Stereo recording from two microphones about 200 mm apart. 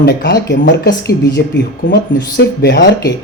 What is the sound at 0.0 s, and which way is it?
Speech, 55° left (ahead or behind).